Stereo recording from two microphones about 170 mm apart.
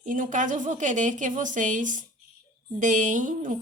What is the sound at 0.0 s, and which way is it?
A woman's voice, 50° right (ahead or behind).